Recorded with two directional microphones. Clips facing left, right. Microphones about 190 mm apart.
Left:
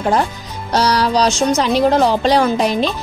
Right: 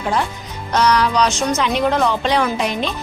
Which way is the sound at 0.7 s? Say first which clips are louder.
Left 1 dB; 35° left (ahead or behind).